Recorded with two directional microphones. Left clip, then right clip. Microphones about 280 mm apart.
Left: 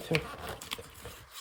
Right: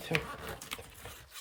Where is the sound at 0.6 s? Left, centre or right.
Centre.